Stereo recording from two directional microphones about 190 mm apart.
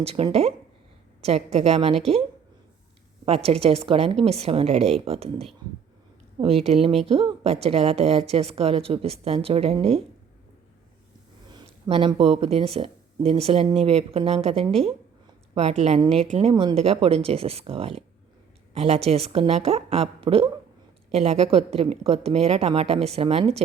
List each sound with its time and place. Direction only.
0.0 s a woman's voice: 30° right (ahead or behind)
3.2 s a woman's voice: 30° right (ahead or behind)
11.5 s a woman's voice: 25° right (ahead or behind)